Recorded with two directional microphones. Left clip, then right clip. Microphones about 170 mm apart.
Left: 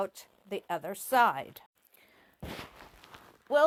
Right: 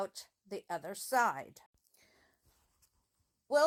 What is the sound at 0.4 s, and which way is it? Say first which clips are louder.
A woman's voice: left 6 dB; 25° left (ahead or behind).